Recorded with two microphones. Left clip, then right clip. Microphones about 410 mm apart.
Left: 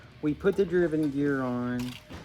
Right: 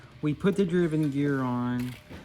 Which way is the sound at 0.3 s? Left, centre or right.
Centre.